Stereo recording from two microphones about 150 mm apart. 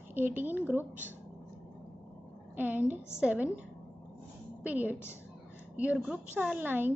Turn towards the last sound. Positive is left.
turn(degrees=-10)  # may be behind; listen again after turning